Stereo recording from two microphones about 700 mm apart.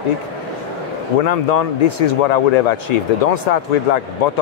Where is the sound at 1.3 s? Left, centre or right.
Left.